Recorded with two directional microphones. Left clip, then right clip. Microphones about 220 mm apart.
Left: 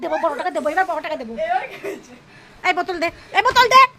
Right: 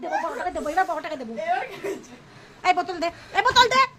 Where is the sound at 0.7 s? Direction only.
5° left (ahead or behind).